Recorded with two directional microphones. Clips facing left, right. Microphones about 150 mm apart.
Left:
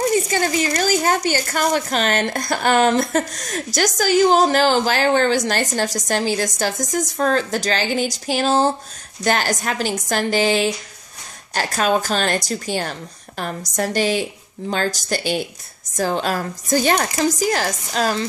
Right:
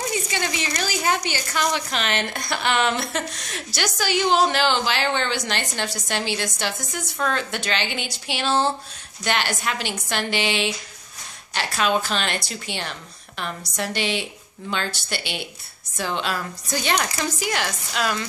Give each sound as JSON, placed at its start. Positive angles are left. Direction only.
{"t": 0.0, "sound": "a woman's voice", "side_deg": 45}